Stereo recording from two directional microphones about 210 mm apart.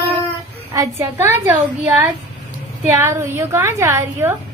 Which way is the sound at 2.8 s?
10° right (ahead or behind).